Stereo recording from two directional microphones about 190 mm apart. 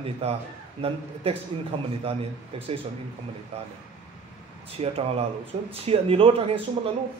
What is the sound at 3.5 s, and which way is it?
Speech, 30° right (ahead or behind).